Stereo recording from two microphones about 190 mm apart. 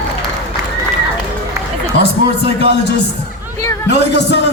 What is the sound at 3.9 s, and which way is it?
Speech, 65° left (ahead or behind).